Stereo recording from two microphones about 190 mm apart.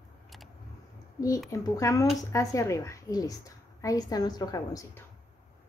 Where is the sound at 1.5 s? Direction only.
15° left (ahead or behind).